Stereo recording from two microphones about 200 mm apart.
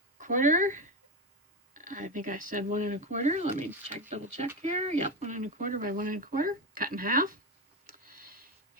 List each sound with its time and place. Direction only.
0.2 s speech: 40° right (ahead or behind)
8.0 s sniff: 45° right (ahead or behind)